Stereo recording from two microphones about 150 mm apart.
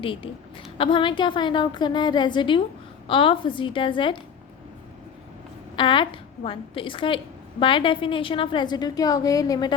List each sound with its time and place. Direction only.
0.0 s a woman's voice: 35° left (ahead or behind)
5.7 s a woman's voice: 35° left (ahead or behind)